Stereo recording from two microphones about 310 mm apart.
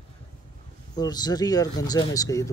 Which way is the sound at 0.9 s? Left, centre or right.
Centre.